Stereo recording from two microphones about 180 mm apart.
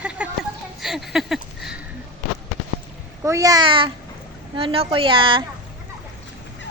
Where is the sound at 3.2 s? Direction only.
20° right (ahead or behind).